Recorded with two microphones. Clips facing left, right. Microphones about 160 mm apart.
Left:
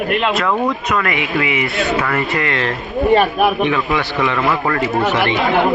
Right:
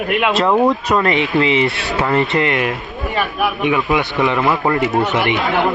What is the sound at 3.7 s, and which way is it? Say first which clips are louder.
A man's voice: right 1 dB; 20° right (ahead or behind).